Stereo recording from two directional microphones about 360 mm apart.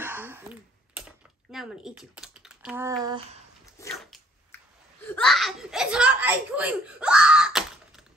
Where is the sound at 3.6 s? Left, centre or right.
Centre.